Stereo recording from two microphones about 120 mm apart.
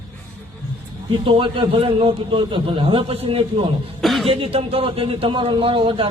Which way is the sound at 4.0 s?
Centre (ahead or behind).